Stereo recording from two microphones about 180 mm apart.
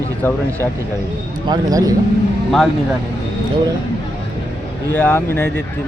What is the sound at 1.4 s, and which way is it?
Speech, 20° right (ahead or behind).